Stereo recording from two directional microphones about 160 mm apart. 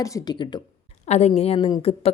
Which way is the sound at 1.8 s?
35° left (ahead or behind).